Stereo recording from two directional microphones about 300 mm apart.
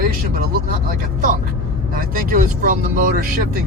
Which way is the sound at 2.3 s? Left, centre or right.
Right.